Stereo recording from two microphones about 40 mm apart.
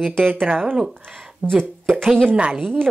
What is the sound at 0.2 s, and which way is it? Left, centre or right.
Speech, right.